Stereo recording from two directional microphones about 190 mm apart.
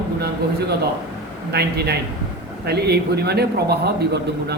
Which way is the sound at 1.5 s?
60° right (ahead or behind).